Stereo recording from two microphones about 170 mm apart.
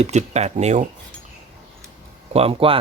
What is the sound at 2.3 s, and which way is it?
Speech, 35° right (ahead or behind).